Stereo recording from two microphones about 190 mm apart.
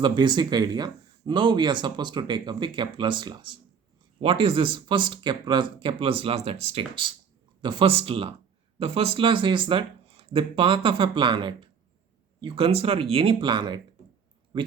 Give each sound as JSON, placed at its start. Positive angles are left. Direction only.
{"t": 0.0, "sound": "speech", "side_deg": -25}